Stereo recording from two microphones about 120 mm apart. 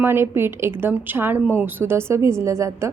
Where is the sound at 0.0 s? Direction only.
20° right (ahead or behind).